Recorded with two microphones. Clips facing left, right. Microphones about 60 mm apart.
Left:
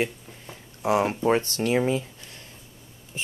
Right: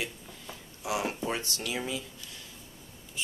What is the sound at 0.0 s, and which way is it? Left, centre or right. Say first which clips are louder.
Speech: left 9 dB; left.